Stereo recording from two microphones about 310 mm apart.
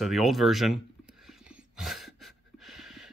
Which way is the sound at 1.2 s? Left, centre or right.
Centre.